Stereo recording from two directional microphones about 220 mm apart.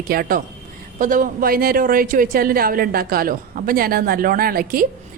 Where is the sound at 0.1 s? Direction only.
40° right (ahead or behind).